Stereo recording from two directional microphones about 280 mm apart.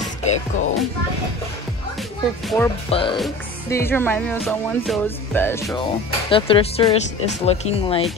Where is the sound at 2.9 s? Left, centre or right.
Centre.